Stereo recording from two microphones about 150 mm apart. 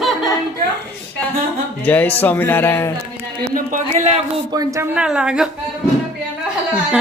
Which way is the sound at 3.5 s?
55° right (ahead or behind).